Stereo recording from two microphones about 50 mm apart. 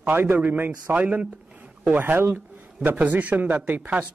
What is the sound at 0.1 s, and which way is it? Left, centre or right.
A man's voice, right.